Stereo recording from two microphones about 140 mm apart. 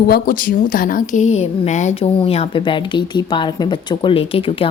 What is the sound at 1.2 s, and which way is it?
A woman's voice, 50° left (ahead or behind).